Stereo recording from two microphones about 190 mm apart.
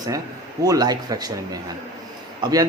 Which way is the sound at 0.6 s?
20° right (ahead or behind).